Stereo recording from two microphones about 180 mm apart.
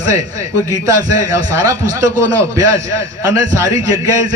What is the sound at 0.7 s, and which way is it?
A man's voice, 20° right (ahead or behind).